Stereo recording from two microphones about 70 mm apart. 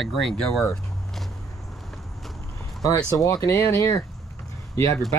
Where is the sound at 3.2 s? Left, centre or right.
Left.